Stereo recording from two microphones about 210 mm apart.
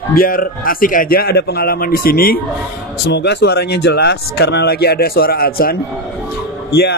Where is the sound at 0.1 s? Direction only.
45° left (ahead or behind).